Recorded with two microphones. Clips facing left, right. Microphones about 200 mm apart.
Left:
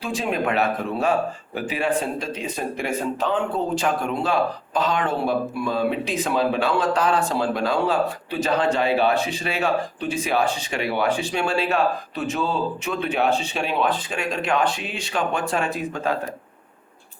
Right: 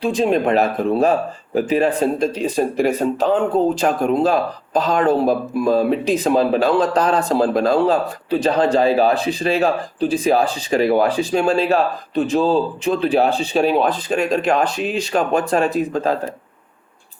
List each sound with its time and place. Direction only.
0.0 s speech: 35° right (ahead or behind)